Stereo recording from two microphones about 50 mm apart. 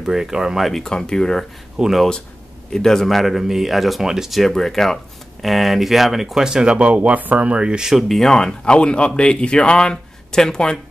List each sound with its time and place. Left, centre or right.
0.0 s speech: centre
0.7 s speech: centre
1.8 s speech: centre
2.7 s speech: centre
4.4 s speech: centre
7.9 s speech: centre